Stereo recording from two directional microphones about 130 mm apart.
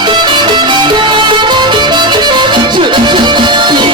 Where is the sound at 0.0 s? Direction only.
35° right (ahead or behind).